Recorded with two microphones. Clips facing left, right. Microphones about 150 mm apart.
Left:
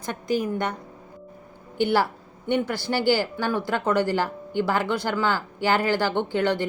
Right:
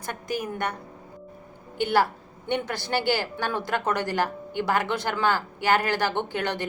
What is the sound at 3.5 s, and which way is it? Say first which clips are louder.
Speech: left 2 dB; 15° right (ahead or behind).